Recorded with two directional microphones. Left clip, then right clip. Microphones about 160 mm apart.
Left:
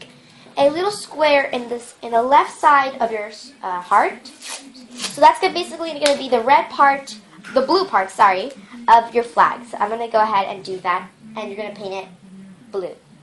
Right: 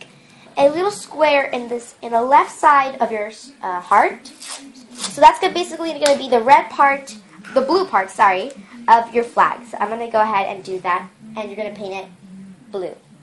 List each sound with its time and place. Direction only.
0.6 s a woman's voice: 20° right (ahead or behind)
7.5 s a woman's voice: 20° right (ahead or behind)